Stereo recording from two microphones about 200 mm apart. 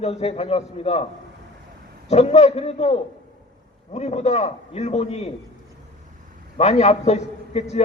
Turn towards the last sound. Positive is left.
turn(degrees=30)  # may be behind; listen again after turning